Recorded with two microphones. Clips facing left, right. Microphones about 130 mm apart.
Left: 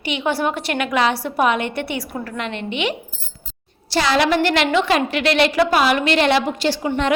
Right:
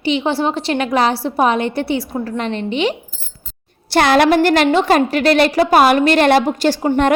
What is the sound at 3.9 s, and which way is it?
A woman's voice, 55° right (ahead or behind).